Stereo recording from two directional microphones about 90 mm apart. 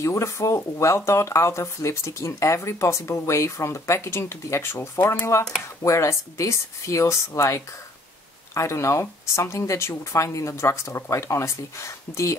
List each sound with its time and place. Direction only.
0.0 s speech: 35° left (ahead or behind)